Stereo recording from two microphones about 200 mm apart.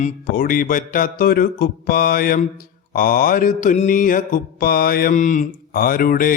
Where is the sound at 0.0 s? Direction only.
45° left (ahead or behind).